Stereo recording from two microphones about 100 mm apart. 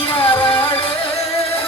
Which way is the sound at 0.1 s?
65° left (ahead or behind).